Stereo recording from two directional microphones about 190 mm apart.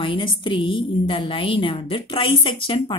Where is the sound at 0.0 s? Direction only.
25° left (ahead or behind).